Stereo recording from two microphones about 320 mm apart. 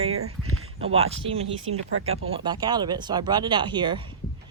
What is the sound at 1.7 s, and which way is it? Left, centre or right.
Speech, centre.